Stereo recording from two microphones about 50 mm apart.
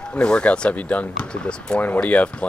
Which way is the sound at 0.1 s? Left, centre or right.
Left.